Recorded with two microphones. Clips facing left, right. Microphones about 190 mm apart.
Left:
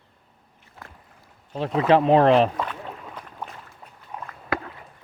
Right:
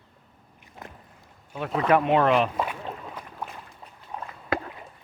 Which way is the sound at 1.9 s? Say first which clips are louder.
Left 4 dB; 30° left (ahead or behind).